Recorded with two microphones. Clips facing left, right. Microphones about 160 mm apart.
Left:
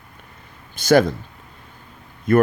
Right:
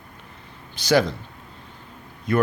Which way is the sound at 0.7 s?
50° left (ahead or behind).